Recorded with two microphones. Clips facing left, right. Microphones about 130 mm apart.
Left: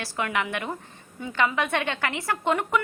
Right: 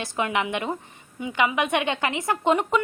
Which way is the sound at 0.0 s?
20° right (ahead or behind).